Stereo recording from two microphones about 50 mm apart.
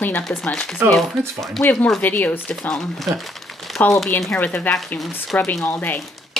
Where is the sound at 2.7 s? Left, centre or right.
Centre.